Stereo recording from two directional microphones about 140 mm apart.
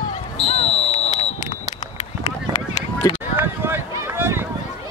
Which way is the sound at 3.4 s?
15° right (ahead or behind).